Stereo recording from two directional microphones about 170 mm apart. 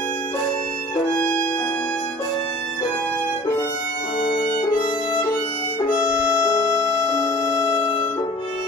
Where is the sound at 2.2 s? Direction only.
35° left (ahead or behind).